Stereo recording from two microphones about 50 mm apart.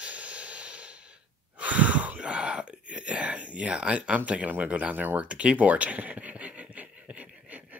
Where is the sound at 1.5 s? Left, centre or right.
Right.